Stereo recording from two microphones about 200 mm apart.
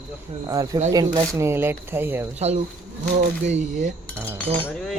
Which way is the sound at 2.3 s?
35° right (ahead or behind).